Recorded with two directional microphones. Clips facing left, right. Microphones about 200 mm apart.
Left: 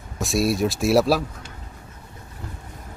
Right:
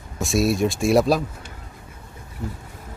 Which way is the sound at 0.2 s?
Centre (ahead or behind).